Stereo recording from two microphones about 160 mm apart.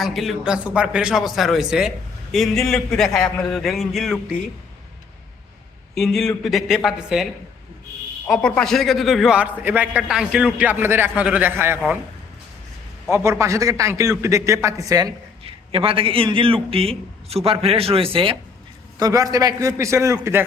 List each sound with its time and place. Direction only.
0.0 s a man's voice: centre (ahead or behind)
5.9 s a man's voice: centre (ahead or behind)
8.3 s a man's voice: 5° left (ahead or behind); by 11.8 s 15° right (ahead or behind)
13.1 s a man's voice: 15° right (ahead or behind)
15.4 s a man's voice: 35° right (ahead or behind)
18.9 s a man's voice: 20° right (ahead or behind)